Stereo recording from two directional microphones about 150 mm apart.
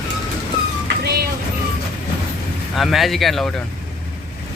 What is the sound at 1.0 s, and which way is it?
Vehicle, 90° right.